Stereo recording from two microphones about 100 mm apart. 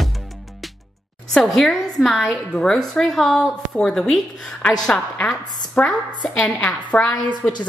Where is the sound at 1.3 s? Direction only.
5° left (ahead or behind).